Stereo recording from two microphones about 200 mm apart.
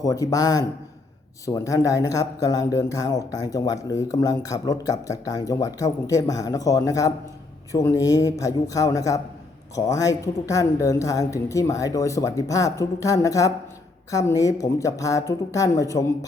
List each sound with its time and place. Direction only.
0.0 s speech: 15° left (ahead or behind)